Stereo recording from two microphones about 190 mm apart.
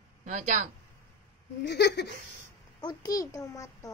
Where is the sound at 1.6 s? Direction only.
60° left (ahead or behind).